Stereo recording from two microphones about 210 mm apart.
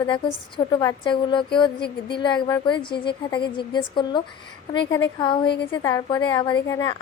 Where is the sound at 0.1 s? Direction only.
20° left (ahead or behind).